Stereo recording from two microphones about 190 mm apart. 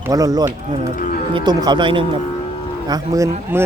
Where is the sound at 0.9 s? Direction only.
45° left (ahead or behind).